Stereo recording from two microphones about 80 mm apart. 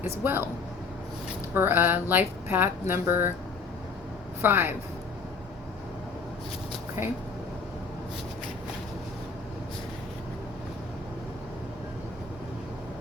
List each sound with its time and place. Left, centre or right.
0.0 s speech: right
1.5 s speech: right
4.4 s speech: right